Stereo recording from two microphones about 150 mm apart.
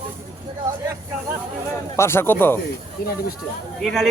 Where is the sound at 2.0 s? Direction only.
15° left (ahead or behind).